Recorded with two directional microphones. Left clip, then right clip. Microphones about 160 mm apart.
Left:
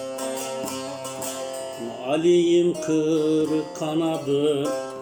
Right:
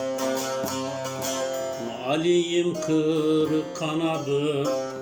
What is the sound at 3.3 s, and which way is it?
Music, 20° right (ahead or behind).